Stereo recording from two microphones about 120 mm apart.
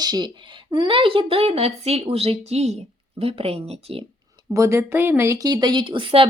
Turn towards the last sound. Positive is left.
turn(degrees=-45)  # may be behind; listen again after turning